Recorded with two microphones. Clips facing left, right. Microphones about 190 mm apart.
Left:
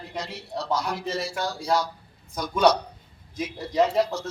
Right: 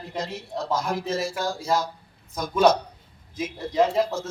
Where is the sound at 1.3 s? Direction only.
5° right (ahead or behind).